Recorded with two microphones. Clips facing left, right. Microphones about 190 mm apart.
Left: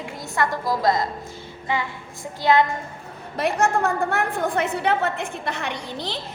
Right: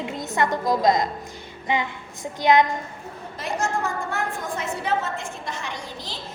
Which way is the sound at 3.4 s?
65° left (ahead or behind).